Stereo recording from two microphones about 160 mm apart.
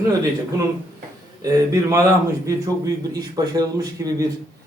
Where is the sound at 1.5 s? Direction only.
20° right (ahead or behind).